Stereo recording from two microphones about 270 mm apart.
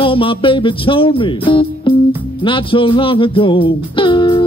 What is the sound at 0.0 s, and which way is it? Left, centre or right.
Music, centre.